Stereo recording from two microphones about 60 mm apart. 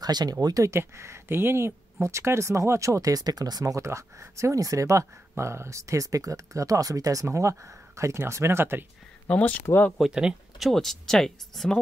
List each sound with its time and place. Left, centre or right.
0.0 s speech: right
0.7 s speech: right
3.8 s speech: right
5.3 s speech: right
7.2 s speech: right
9.3 s speech: left
10.0 s speech: centre